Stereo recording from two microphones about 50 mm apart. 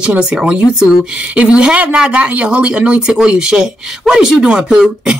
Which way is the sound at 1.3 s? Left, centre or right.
Right.